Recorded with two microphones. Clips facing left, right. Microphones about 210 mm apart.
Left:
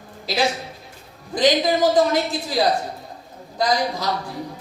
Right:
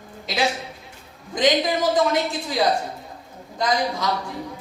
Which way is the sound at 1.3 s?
35° left (ahead or behind).